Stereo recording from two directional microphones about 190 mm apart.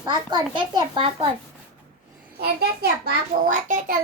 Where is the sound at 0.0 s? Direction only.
25° right (ahead or behind).